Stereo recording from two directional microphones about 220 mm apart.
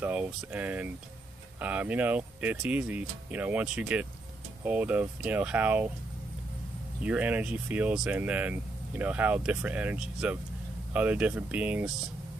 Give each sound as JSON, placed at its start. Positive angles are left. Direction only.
{"t": 0.0, "sound": "speech", "side_deg": -5}
{"t": 7.0, "sound": "speech", "side_deg": -5}